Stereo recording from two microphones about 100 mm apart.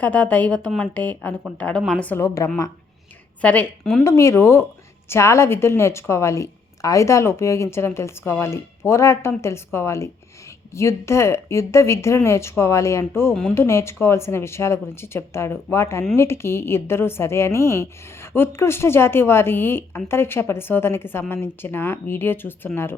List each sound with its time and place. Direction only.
0.0 s speech: 15° left (ahead or behind)
2.1 s a woman's voice: 30° left (ahead or behind)
3.4 s speech: 15° left (ahead or behind)
4.0 s a woman's voice: 30° left (ahead or behind)